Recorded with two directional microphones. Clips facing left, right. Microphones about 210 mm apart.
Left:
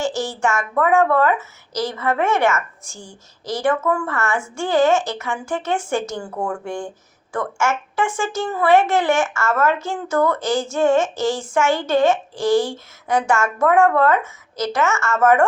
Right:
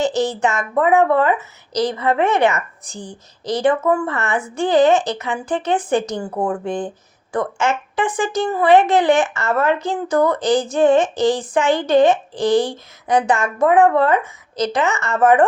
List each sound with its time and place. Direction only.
0.0 s a woman's voice: 20° right (ahead or behind)